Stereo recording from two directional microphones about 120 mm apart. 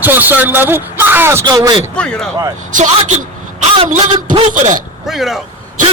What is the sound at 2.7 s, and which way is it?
Speech, 90° right.